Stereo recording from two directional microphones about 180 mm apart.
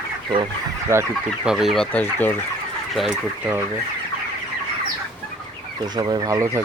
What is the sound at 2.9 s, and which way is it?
Speech, centre (ahead or behind).